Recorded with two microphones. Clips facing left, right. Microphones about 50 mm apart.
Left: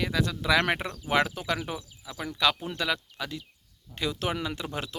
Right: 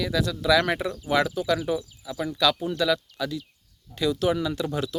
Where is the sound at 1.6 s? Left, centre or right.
Left.